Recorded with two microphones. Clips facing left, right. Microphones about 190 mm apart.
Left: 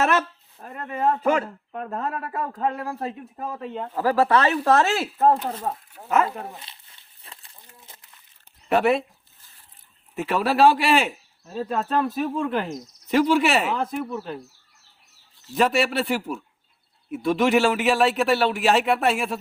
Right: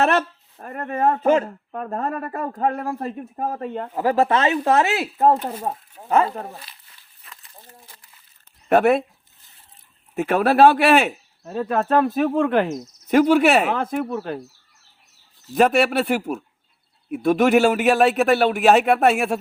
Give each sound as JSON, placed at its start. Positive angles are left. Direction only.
{"t": 0.6, "sound": "speech", "side_deg": -55}
{"t": 1.2, "sound": "speech", "side_deg": -25}
{"t": 1.7, "sound": "speech", "side_deg": -45}
{"t": 3.9, "sound": "speech", "side_deg": -20}
{"t": 6.1, "sound": "speech", "side_deg": -30}
{"t": 6.6, "sound": "a sound", "side_deg": 25}
{"t": 8.7, "sound": "speech", "side_deg": -55}
{"t": 10.2, "sound": "speech", "side_deg": -50}
{"t": 12.7, "sound": "speech", "side_deg": -45}
{"t": 15.5, "sound": "speech", "side_deg": -55}